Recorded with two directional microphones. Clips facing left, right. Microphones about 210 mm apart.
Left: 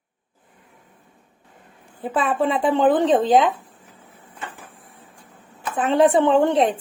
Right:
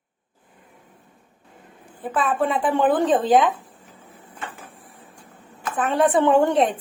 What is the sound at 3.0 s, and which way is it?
Speech, centre (ahead or behind).